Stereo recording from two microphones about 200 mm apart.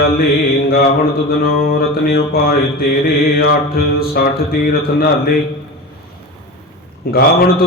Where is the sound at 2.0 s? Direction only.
50° left (ahead or behind).